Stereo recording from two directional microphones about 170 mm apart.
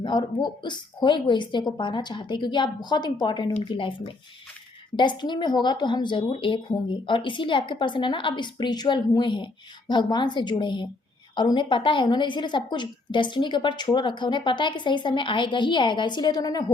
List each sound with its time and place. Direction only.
0.0 s a woman's voice: 25° left (ahead or behind)